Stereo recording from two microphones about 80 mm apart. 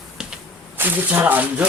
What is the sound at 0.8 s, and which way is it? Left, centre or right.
Speech, right.